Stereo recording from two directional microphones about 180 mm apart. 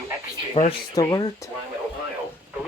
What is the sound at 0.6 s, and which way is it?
Speech, 40° left (ahead or behind).